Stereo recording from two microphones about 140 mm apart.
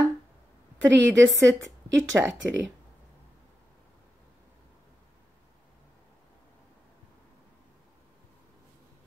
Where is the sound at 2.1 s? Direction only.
10° right (ahead or behind).